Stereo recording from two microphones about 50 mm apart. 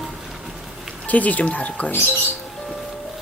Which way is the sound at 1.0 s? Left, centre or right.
Left.